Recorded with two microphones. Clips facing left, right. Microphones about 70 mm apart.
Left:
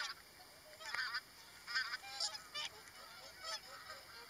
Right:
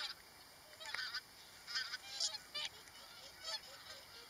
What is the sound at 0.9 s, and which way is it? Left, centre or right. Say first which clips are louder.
Honk: left 4 dB; left.